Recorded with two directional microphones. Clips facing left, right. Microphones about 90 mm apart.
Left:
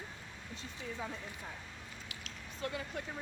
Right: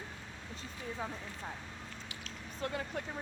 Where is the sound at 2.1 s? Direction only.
40° right (ahead or behind).